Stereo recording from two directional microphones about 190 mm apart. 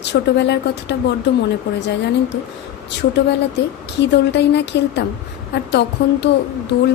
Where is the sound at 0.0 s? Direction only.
65° left (ahead or behind).